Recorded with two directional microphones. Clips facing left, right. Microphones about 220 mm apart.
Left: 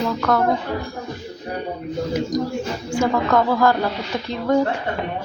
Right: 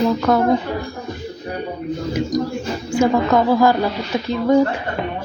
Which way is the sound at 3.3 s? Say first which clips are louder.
Right 2 dB; 5° right (ahead or behind).